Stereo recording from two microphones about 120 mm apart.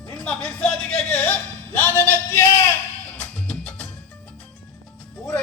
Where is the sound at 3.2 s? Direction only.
10° left (ahead or behind).